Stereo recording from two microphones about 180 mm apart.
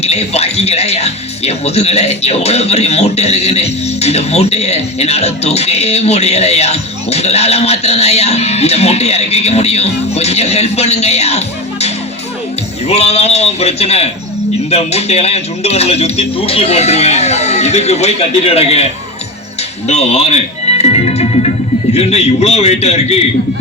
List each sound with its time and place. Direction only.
0.0 s speech: 35° left (ahead or behind)
19.9 s speech: 35° left (ahead or behind)